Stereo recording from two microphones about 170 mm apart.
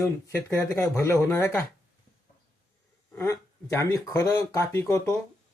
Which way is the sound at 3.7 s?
20° left (ahead or behind).